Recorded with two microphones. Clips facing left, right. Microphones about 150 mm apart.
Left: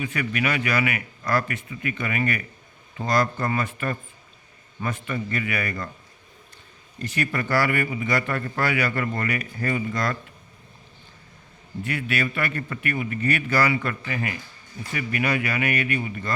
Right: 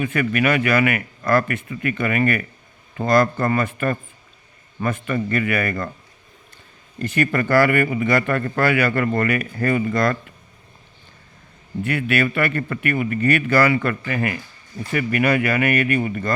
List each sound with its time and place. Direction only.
0.0 s speech: 55° right (ahead or behind)
7.0 s speech: 55° right (ahead or behind)
11.8 s speech: 60° right (ahead or behind)